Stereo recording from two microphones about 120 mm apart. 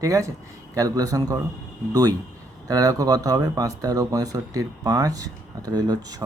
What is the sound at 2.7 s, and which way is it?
Speech, 30° right (ahead or behind).